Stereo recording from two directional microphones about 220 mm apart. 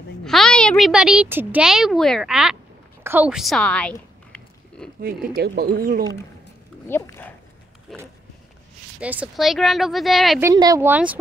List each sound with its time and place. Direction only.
0.2 s a woman's voice: centre (ahead or behind)
3.0 s a sound: 10° right (ahead or behind)
5.0 s speech: 45° right (ahead or behind)
6.9 s speech: 10° left (ahead or behind)
10.4 s speech: 15° right (ahead or behind)